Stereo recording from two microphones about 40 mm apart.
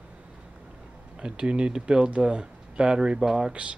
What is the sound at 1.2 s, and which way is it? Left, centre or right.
Speech, right.